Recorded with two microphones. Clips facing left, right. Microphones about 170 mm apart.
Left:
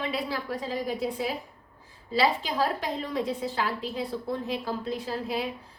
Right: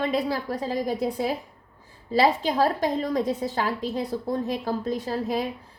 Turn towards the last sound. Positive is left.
turn(degrees=-45)  # may be behind; listen again after turning